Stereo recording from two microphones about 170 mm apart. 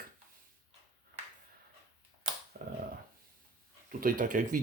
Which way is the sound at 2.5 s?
60° right (ahead or behind).